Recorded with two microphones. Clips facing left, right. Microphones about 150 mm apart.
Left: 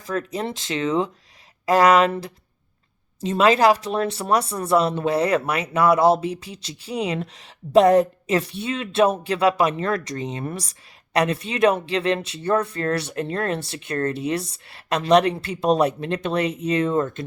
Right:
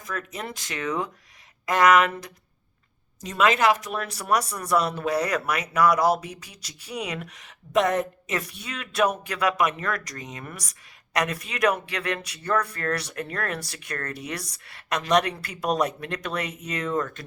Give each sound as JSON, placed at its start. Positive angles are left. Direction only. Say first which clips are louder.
{"t": 0.0, "sound": "speech", "louder": "left 7 dB", "side_deg": 30}